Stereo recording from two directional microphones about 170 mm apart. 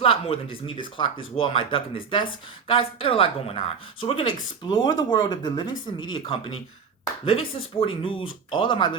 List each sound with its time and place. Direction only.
0.0 s speech: 35° left (ahead or behind)